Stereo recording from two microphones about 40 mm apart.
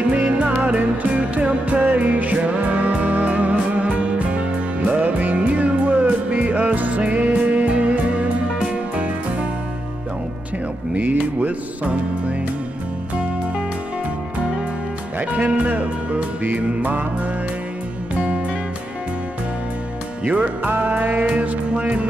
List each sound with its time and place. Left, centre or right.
0.1 s music: right
1.9 s music: right
10.9 s music: right
15.1 s speech: right
16.5 s music: right
20.2 s music: right